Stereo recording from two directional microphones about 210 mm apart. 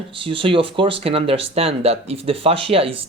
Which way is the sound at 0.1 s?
25° right (ahead or behind).